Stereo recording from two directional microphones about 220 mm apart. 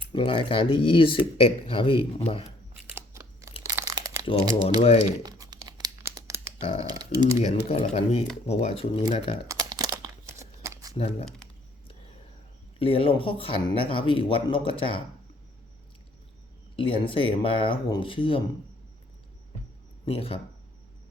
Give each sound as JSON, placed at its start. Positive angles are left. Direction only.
{"t": 0.1, "sound": "speech", "side_deg": 20}
{"t": 2.9, "sound": "scissors", "side_deg": -15}
{"t": 3.7, "sound": "crumpling", "side_deg": -15}
{"t": 6.8, "sound": "speech", "side_deg": -20}
{"t": 7.4, "sound": "speech", "side_deg": 30}
{"t": 9.5, "sound": "crumpling", "side_deg": -15}
{"t": 10.9, "sound": "speech", "side_deg": 25}
{"t": 12.8, "sound": "speech", "side_deg": 25}
{"t": 16.7, "sound": "speech", "side_deg": 25}
{"t": 20.1, "sound": "speech", "side_deg": 25}